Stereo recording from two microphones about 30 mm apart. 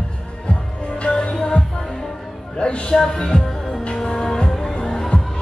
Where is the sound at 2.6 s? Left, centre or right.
Left.